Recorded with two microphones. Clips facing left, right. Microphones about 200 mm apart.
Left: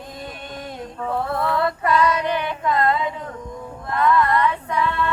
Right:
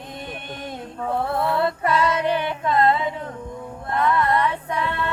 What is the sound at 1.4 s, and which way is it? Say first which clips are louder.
Female singing: even; 25° right (ahead or behind).